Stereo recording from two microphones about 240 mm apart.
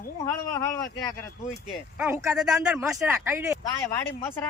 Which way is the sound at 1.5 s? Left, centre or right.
Centre.